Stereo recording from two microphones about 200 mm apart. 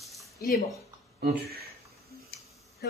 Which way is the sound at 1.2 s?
50° right (ahead or behind).